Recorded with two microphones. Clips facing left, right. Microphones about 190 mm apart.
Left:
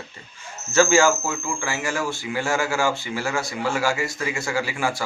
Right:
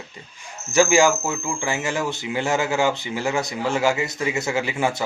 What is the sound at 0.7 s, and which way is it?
Speech, 15° right (ahead or behind).